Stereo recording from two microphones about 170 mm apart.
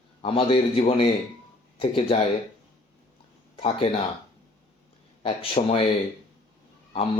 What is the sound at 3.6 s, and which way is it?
Speech, 35° left (ahead or behind).